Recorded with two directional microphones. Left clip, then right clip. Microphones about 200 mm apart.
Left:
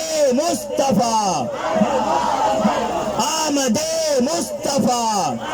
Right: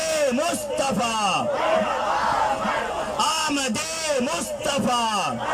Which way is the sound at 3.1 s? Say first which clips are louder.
Left 1 dB; 30° left (ahead or behind).